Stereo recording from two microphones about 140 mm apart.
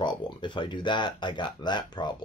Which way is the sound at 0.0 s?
35° left (ahead or behind).